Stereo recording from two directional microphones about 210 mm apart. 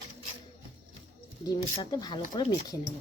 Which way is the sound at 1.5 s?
20° left (ahead or behind).